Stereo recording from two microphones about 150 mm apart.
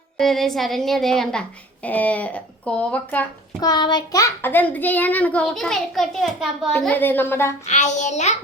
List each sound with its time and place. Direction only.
0.2 s a woman's voice: centre (ahead or behind)
3.6 s a child's voice: 30° left (ahead or behind)
7.7 s a child's voice: 50° left (ahead or behind)